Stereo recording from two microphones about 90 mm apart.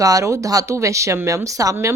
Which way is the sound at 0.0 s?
40° right (ahead or behind).